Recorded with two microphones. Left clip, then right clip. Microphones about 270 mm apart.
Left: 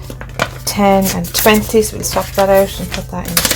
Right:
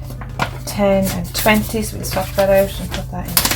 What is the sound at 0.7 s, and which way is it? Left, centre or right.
Speech, left.